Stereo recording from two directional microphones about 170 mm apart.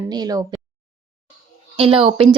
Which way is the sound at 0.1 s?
25° right (ahead or behind).